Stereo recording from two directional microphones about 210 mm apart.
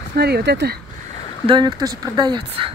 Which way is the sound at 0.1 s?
50° right (ahead or behind).